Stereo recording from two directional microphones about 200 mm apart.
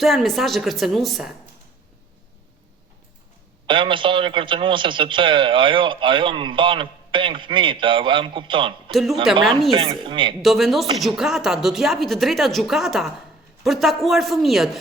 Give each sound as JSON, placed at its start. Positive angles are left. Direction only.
{"t": 0.0, "sound": "a woman's voice", "side_deg": 0}
{"t": 3.7, "sound": "a man's voice", "side_deg": -25}
{"t": 8.9, "sound": "a woman's voice", "side_deg": 0}
{"t": 9.7, "sound": "a man's voice", "side_deg": -25}
{"t": 10.4, "sound": "a woman's voice", "side_deg": 0}